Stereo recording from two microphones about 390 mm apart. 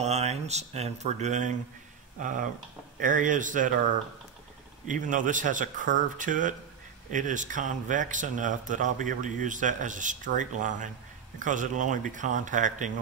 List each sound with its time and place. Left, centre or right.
0.0 s speech: centre
3.0 s speech: centre
4.8 s speech: centre